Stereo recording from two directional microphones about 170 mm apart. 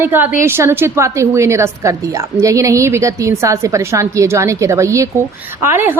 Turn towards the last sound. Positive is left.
turn(degrees=-15)  # may be behind; listen again after turning